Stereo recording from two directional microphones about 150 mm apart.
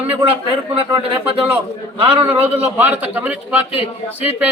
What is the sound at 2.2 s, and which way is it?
Speech, 10° right (ahead or behind).